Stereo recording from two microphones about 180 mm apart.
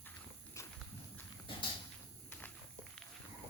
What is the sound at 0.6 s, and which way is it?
Horse, 15° left (ahead or behind).